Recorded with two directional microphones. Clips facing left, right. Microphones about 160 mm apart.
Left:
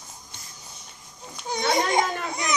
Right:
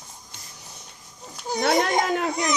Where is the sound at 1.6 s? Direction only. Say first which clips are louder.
Right 2 dB; 60° right (ahead or behind).